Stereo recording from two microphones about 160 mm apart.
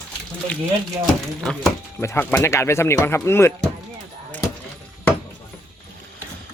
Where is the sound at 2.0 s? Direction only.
15° left (ahead or behind).